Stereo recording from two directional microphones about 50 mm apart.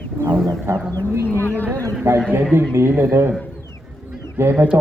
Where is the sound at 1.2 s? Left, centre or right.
Left.